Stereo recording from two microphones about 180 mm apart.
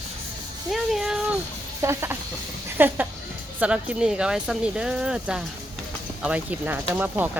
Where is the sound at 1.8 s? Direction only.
15° right (ahead or behind).